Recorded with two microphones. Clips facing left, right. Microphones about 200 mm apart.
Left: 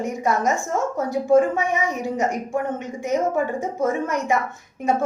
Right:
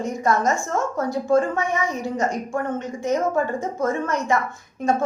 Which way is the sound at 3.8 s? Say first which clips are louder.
Left 1 dB; 15° left (ahead or behind).